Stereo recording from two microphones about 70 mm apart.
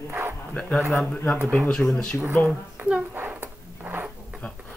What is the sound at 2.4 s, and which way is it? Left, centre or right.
Speech, centre.